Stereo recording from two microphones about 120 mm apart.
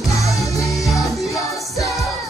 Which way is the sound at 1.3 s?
30° left (ahead or behind).